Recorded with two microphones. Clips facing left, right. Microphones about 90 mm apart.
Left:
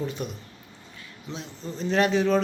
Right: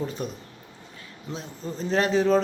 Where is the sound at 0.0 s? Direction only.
40° right (ahead or behind).